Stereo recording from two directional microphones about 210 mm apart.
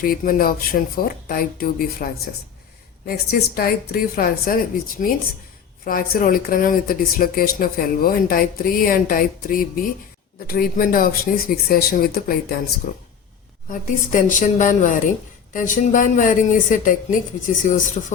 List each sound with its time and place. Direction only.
0.0 s speech: 45° left (ahead or behind)
3.1 s speech: 45° left (ahead or behind)
5.8 s a woman's voice: 45° left (ahead or behind)